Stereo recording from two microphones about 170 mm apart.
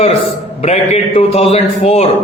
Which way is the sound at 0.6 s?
40° left (ahead or behind).